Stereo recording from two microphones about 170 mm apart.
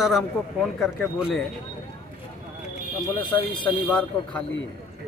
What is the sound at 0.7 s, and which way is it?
Speech, centre (ahead or behind).